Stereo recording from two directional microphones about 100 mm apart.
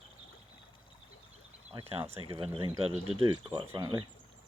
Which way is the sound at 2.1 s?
65° right (ahead or behind).